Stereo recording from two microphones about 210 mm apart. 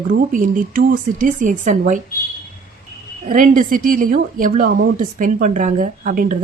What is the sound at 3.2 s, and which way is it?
Speech, 40° right (ahead or behind).